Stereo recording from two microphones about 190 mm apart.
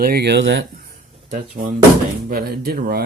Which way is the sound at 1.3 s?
45° right (ahead or behind).